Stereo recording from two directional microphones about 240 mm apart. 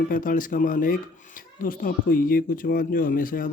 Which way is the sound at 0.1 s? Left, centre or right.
Left.